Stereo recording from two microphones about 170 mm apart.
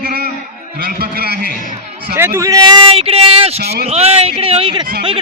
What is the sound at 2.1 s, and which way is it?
Speech, 15° right (ahead or behind).